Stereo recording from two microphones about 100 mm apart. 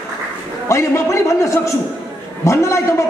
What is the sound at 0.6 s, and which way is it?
A man's voice, 30° left (ahead or behind).